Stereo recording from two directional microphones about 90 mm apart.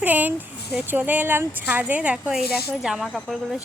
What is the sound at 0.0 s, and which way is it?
Speech, 20° right (ahead or behind).